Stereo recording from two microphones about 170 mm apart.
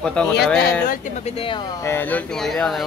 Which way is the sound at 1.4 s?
30° left (ahead or behind).